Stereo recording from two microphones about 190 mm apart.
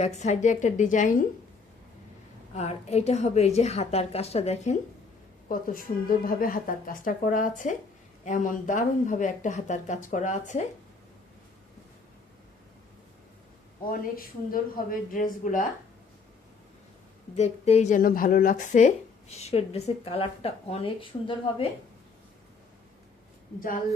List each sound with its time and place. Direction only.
0.0 s speech: 35° left (ahead or behind)
2.6 s speech: 35° left (ahead or behind)
5.5 s speech: 45° left (ahead or behind)
13.8 s speech: 50° left (ahead or behind)
17.3 s speech: 35° left (ahead or behind)
23.6 s speech: 45° left (ahead or behind)